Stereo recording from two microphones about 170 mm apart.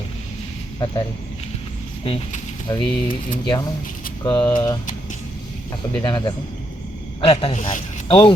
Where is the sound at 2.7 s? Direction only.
25° left (ahead or behind).